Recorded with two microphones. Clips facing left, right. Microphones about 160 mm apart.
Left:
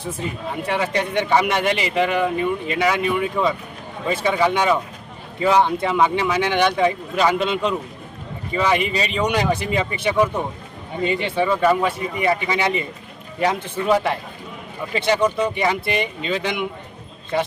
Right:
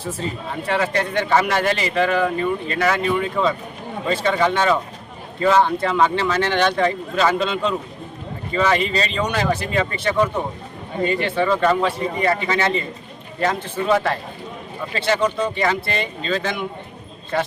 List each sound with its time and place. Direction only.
0.5 s a man's voice: 15° left (ahead or behind)